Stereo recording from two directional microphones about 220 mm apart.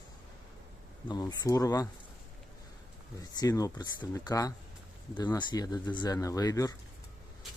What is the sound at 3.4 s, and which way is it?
Speech, 15° left (ahead or behind).